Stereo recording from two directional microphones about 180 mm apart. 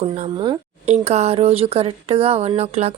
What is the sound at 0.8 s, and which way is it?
Speech, 35° right (ahead or behind).